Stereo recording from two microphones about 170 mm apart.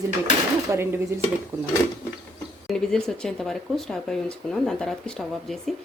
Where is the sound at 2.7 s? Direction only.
5° left (ahead or behind).